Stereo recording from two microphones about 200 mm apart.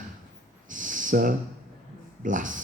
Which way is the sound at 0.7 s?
40° right (ahead or behind).